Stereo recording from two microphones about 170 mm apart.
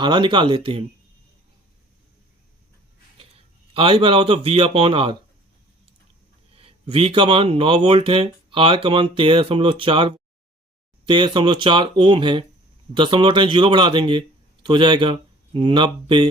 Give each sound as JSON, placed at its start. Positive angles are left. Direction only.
{"t": 0.0, "sound": "speech", "side_deg": -25}
{"t": 3.2, "sound": "speech", "side_deg": -35}
{"t": 6.6, "sound": "speech", "side_deg": -35}